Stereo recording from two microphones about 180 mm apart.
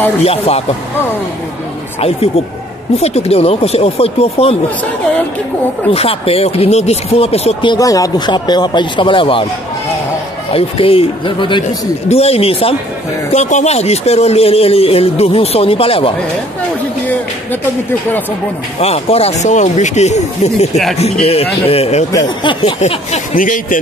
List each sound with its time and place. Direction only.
0.2 s a man's voice: 35° left (ahead or behind)
2.0 s a man's voice: 35° left (ahead or behind)
5.9 s a man's voice: 30° left (ahead or behind)
7.7 s speech: 20° left (ahead or behind)
10.5 s a man's voice: 30° left (ahead or behind)
17.0 s speech: 10° left (ahead or behind)
18.8 s a man's voice: 35° left (ahead or behind)
20.7 s a man's voice: centre (ahead or behind)
21.0 s a man's voice: 35° left (ahead or behind)
22.8 s speech: 40° left (ahead or behind)